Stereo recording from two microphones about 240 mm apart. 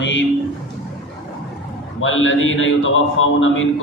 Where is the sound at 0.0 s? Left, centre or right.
Left.